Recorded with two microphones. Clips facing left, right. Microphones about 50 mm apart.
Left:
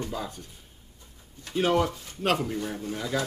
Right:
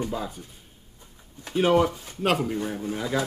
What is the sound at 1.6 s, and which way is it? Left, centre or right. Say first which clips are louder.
A man's voice: right 4 dB; centre.